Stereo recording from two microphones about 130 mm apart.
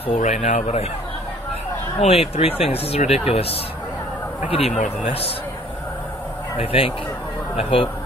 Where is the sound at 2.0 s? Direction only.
50° left (ahead or behind).